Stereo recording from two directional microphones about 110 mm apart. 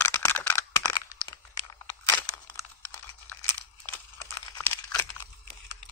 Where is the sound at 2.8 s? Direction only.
20° left (ahead or behind).